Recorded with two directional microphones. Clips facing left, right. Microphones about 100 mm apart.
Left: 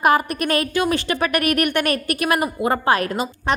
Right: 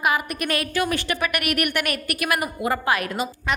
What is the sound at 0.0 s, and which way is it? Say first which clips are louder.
Speech: left 6 dB; 40° left (ahead or behind).